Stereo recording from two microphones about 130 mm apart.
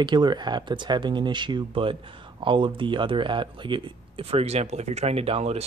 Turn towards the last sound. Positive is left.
turn(degrees=-55)  # may be behind; listen again after turning